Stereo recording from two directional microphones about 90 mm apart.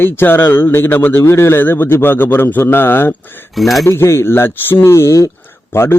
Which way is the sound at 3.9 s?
30° left (ahead or behind).